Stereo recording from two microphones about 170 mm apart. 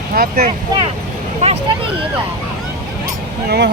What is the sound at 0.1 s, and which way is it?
Speech, 60° right (ahead or behind).